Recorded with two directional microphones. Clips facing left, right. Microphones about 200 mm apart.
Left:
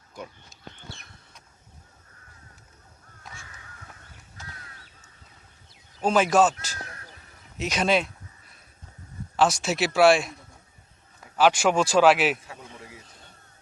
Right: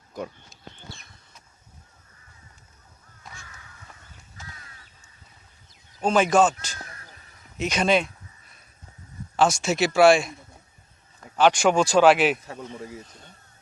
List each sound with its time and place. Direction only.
0.5 s bird: centre (ahead or behind)
6.0 s speech: 5° left (ahead or behind)
7.6 s a sound: centre (ahead or behind)
9.3 s speech: centre (ahead or behind)
11.3 s speech: 5° left (ahead or behind)
12.5 s a sound: 40° right (ahead or behind)